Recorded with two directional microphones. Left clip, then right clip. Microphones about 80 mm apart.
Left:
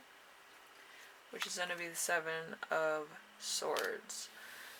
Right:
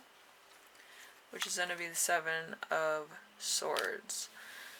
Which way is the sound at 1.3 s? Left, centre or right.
Right.